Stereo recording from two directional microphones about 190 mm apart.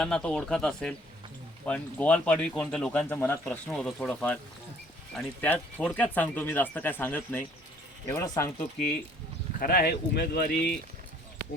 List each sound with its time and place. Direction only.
0.0 s speech: 5° left (ahead or behind)
9.6 s speech: 55° left (ahead or behind)